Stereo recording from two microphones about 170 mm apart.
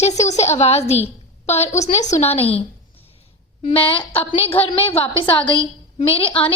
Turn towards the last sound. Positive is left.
turn(degrees=30)  # may be behind; listen again after turning